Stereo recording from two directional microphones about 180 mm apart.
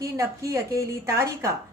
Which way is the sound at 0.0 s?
15° right (ahead or behind).